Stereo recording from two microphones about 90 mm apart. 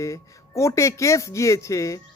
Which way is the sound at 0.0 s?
35° left (ahead or behind).